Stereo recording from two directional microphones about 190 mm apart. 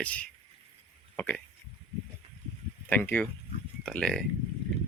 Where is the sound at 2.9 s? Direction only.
10° left (ahead or behind).